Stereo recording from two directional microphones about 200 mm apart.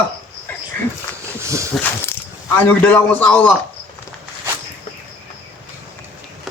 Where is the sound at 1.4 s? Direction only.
15° right (ahead or behind).